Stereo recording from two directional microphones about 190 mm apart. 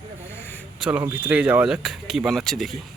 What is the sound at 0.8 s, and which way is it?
Speech, 5° right (ahead or behind).